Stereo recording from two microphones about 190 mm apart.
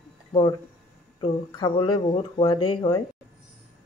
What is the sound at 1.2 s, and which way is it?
Speech, 20° left (ahead or behind).